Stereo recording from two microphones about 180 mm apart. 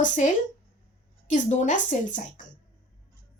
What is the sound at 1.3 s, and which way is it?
Speech, 40° left (ahead or behind).